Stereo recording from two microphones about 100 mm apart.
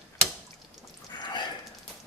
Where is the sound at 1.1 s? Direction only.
45° left (ahead or behind).